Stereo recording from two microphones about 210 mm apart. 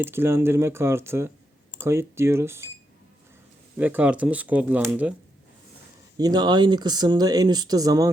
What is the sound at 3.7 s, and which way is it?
Speech, 10° right (ahead or behind).